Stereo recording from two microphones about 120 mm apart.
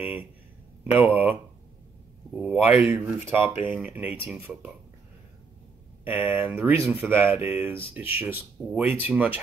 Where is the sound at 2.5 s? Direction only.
15° right (ahead or behind).